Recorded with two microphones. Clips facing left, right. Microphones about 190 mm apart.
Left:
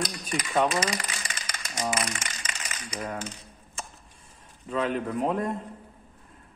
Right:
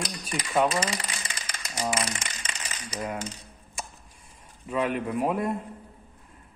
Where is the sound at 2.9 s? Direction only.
10° right (ahead or behind).